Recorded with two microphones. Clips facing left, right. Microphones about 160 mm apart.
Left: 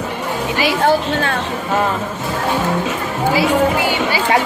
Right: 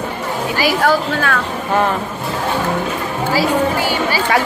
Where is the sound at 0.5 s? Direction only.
20° left (ahead or behind).